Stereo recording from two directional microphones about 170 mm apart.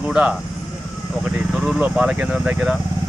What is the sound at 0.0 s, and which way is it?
Speech, 5° right (ahead or behind).